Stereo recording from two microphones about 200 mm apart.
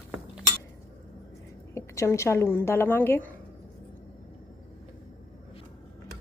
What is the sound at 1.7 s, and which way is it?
A woman's voice, 15° left (ahead or behind).